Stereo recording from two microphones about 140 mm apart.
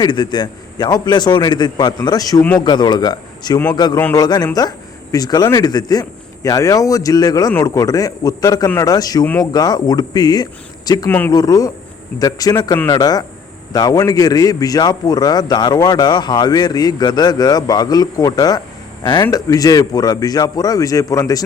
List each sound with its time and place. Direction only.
0.0 s a man's voice: 30° left (ahead or behind)